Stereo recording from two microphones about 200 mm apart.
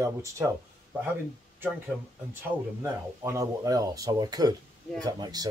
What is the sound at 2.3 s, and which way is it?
Speech, 15° right (ahead or behind).